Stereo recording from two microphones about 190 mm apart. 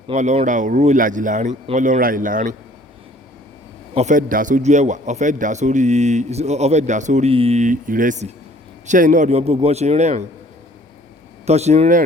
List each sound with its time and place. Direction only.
0.1 s a man's voice: 35° right (ahead or behind)
3.9 s a man's voice: 40° right (ahead or behind)
11.4 s a man's voice: 35° right (ahead or behind)